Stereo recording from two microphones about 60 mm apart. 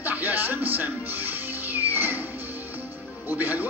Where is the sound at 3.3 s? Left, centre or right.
Right.